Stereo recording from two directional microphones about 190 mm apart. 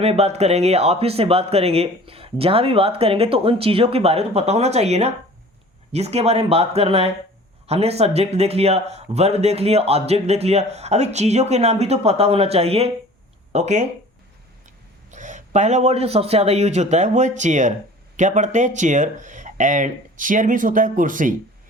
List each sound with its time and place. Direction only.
0.0 s speech: 35° right (ahead or behind)
15.1 s speech: 40° right (ahead or behind)